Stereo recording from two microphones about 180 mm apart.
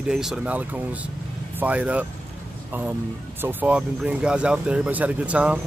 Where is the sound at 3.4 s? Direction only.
10° right (ahead or behind).